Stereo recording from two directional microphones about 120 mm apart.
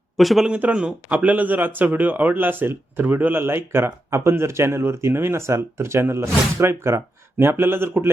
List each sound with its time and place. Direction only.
0.2 s speech: centre (ahead or behind)
0.5 s speech: 10° right (ahead or behind)